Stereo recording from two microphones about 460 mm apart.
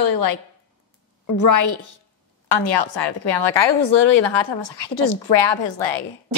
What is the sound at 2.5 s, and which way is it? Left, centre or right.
A woman's voice, left.